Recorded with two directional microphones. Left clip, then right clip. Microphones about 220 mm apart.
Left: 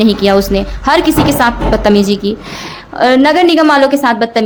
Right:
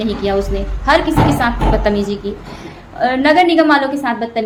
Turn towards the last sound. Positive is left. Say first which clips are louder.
# left 8 dB
turn(degrees=50)  # may be behind; listen again after turning